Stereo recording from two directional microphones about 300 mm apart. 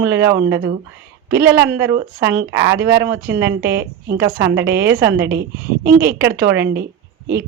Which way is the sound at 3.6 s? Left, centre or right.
Right.